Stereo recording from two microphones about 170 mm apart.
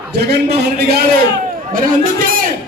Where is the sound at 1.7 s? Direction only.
55° right (ahead or behind).